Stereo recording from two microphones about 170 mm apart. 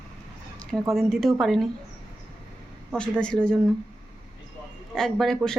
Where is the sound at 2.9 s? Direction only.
5° left (ahead or behind).